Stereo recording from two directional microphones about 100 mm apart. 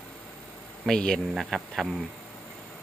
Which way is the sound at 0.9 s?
5° left (ahead or behind).